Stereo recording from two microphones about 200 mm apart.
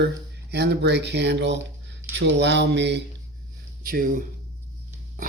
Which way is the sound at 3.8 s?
45° right (ahead or behind).